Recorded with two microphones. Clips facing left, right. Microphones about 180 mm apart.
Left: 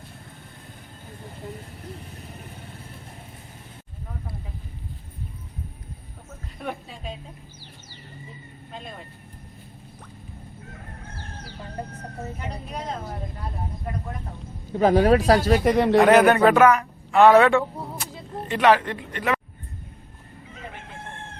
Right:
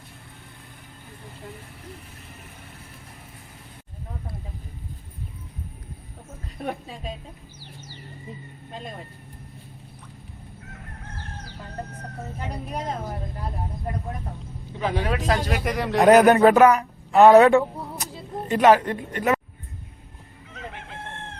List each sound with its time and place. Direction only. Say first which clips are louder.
14.7 s speech: left 9 dB; 45° left (ahead or behind)
15.7 s speech: left 7 dB; 25° left (ahead or behind)
16.0 s speech: right 6 dB; 40° right (ahead or behind)